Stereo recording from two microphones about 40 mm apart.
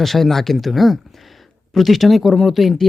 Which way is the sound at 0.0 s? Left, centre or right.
Centre.